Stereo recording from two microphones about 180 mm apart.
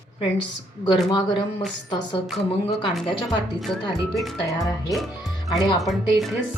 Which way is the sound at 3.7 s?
Centre (ahead or behind).